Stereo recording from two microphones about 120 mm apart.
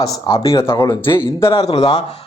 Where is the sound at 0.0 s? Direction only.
30° left (ahead or behind).